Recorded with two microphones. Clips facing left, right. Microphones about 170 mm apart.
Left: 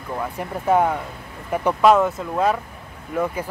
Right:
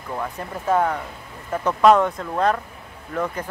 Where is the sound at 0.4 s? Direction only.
15° left (ahead or behind).